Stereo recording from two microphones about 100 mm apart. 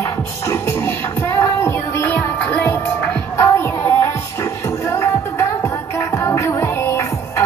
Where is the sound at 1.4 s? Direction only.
25° left (ahead or behind).